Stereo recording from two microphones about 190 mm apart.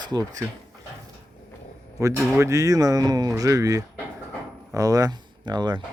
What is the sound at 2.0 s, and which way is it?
Speech, 15° right (ahead or behind).